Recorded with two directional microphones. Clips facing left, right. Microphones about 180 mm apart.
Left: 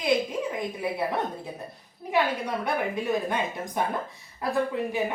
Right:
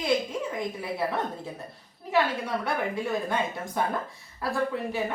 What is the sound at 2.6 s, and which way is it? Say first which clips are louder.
A woman's voice: left 4 dB; 15° left (ahead or behind).